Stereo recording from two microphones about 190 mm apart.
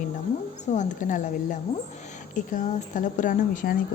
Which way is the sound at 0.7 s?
40° left (ahead or behind).